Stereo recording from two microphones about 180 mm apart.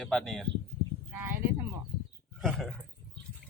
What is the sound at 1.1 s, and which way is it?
Speech, 15° right (ahead or behind).